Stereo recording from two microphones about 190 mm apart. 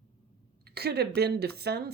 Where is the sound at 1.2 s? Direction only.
55° right (ahead or behind).